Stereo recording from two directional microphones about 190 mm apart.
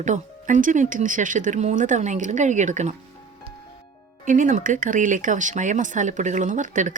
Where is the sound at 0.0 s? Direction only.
40° right (ahead or behind).